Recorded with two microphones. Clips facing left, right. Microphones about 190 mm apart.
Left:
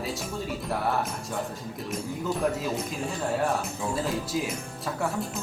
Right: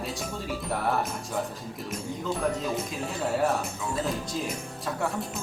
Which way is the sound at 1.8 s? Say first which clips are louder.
Left 1 dB; centre (ahead or behind).